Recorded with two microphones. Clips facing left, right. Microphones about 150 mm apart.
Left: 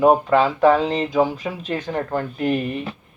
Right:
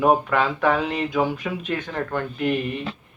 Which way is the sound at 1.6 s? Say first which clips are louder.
Left 5 dB; 35° left (ahead or behind).